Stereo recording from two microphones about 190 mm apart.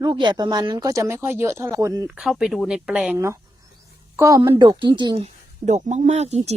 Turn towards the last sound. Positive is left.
turn(degrees=-35)  # may be behind; listen again after turning